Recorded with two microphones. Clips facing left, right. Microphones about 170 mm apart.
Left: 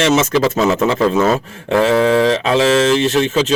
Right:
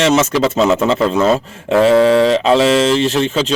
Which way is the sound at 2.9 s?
Centre (ahead or behind).